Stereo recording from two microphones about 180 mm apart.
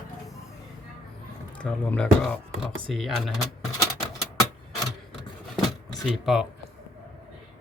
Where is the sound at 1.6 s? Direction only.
5° left (ahead or behind).